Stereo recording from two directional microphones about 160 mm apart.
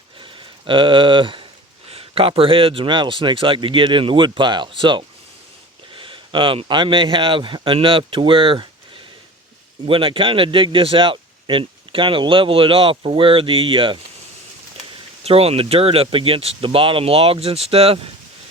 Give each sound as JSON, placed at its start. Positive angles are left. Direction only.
{"t": 0.2, "sound": "a sound", "side_deg": -30}
{"t": 1.9, "sound": "speech", "side_deg": -35}
{"t": 9.8, "sound": "speech", "side_deg": -35}
{"t": 15.2, "sound": "speech", "side_deg": -40}